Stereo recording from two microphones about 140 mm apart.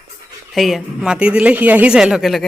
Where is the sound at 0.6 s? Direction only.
Centre (ahead or behind).